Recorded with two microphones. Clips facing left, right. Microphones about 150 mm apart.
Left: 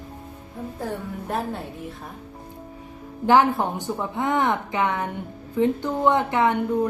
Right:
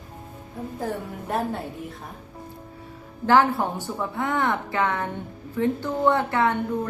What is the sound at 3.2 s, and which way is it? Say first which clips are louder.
A woman's voice: left 1 dB; 20° left (ahead or behind).